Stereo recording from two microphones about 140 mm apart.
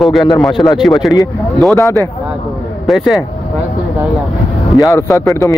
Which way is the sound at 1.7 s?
20° left (ahead or behind).